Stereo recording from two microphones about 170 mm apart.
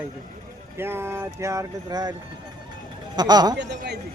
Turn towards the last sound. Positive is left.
turn(degrees=-85)